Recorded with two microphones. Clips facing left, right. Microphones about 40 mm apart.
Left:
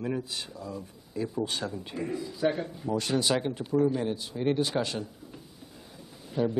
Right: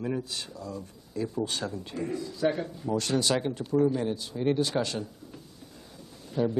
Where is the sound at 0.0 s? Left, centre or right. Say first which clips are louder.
Even; centre.